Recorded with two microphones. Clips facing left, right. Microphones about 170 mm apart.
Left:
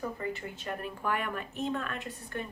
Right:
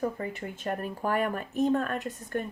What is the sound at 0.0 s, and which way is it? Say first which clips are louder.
Speech: right 4 dB; 45° right (ahead or behind).